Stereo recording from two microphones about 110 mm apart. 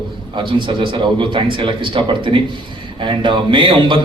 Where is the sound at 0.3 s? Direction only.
50° right (ahead or behind).